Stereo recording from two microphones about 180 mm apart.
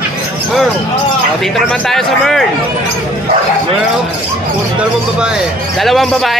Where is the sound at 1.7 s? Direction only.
Centre (ahead or behind).